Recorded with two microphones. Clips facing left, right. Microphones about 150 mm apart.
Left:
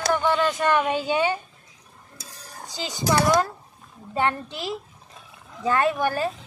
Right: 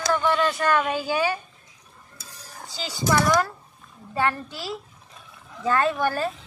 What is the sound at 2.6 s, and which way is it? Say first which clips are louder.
Speech: left 1 dB; 20° left (ahead or behind).